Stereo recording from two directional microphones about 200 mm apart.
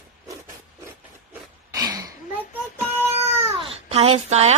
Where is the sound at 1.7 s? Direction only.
15° right (ahead or behind).